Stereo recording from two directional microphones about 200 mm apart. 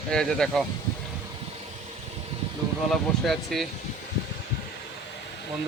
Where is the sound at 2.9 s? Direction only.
Centre (ahead or behind).